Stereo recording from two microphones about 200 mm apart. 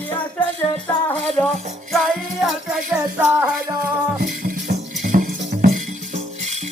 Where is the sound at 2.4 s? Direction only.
Centre (ahead or behind).